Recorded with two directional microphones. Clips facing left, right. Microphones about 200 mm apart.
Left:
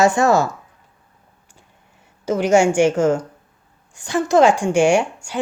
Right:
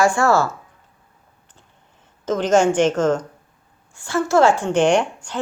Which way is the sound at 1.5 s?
10° left (ahead or behind).